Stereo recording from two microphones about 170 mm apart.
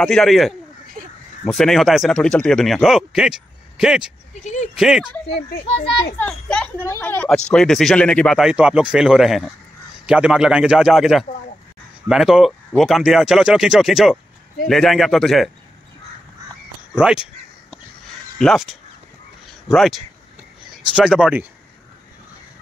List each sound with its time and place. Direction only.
0.0 s a woman's voice: 5° left (ahead or behind)
5.7 s a child's voice: 35° left (ahead or behind)
6.1 s a woman's voice: 5° left (ahead or behind)
17.0 s a sound: 5° right (ahead or behind)
18.4 s a woman's voice: centre (ahead or behind)